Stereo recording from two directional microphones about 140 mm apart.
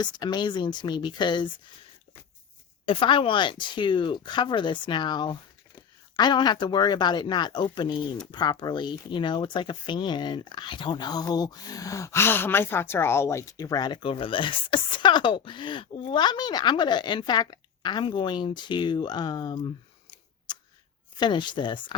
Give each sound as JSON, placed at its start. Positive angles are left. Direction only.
{"t": 0.0, "sound": "speech", "side_deg": 30}
{"t": 2.8, "sound": "speech", "side_deg": 40}
{"t": 20.5, "sound": "shuffling cards", "side_deg": 30}
{"t": 21.2, "sound": "speech", "side_deg": 35}